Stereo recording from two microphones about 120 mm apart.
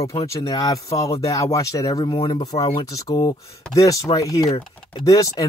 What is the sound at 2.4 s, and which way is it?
Speech, 30° left (ahead or behind).